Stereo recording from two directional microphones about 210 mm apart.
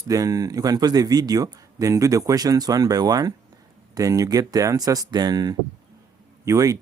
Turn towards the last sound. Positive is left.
turn(degrees=-15)  # may be behind; listen again after turning